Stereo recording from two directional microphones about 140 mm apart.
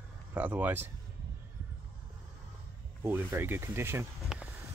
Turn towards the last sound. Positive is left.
turn(degrees=0)  # may be behind; listen again after turning